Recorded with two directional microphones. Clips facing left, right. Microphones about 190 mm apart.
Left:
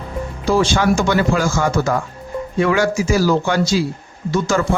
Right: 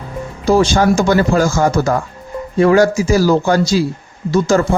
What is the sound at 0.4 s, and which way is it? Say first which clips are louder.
A man's voice: right 4 dB; 40° right (ahead or behind).